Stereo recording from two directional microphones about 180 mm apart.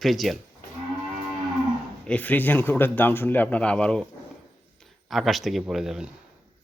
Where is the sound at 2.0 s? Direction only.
10° left (ahead or behind).